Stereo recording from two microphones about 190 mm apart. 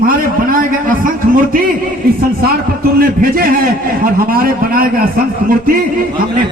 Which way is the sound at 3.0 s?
50° right (ahead or behind).